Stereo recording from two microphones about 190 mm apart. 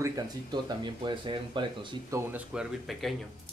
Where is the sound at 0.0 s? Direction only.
20° right (ahead or behind).